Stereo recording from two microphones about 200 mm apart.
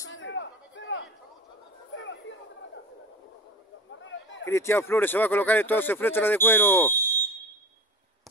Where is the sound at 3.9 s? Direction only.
70° left (ahead or behind).